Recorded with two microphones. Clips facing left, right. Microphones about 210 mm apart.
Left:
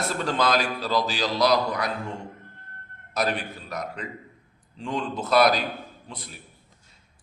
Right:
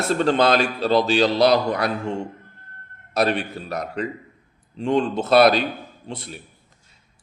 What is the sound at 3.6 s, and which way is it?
Speech, 30° right (ahead or behind).